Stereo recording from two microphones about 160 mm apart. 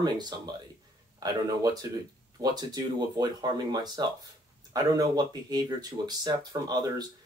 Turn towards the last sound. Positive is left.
turn(degrees=-25)  # may be behind; listen again after turning